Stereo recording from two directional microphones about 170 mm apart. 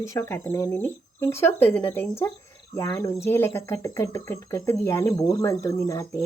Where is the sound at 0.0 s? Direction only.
15° left (ahead or behind).